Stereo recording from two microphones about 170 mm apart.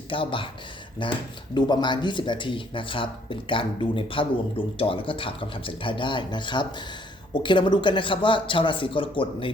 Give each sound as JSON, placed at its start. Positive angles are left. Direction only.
{"t": 0.1, "sound": "speech", "side_deg": 30}